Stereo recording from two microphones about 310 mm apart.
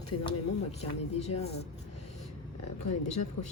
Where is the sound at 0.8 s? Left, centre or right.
Left.